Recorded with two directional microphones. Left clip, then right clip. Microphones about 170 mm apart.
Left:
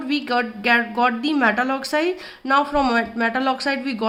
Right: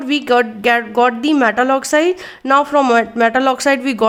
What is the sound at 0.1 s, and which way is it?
Speech, 50° right (ahead or behind).